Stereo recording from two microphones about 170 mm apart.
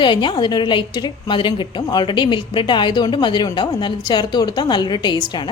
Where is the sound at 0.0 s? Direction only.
30° left (ahead or behind).